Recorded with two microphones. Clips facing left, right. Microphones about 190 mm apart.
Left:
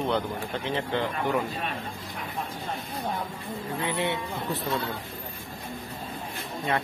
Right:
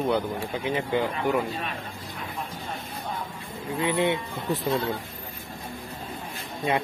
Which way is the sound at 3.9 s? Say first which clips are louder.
Right 5 dB; 20° right (ahead or behind).